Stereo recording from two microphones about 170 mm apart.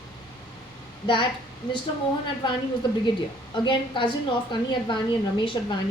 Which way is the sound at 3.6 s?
25° left (ahead or behind).